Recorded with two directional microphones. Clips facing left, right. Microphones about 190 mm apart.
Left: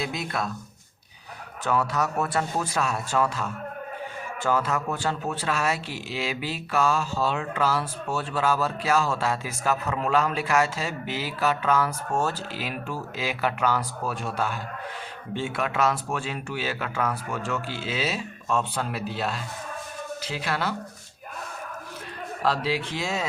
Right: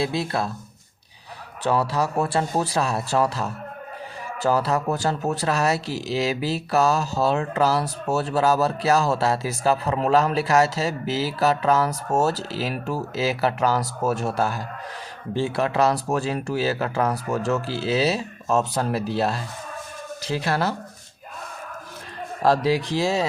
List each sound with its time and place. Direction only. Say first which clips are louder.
0.0 s speech: right 5 dB; 30° right (ahead or behind)
1.6 s speech: right 3 dB; 35° right (ahead or behind)
22.4 s speech: right 6 dB; 40° right (ahead or behind)